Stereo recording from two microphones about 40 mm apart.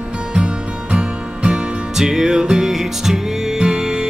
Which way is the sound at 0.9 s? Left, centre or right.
Right.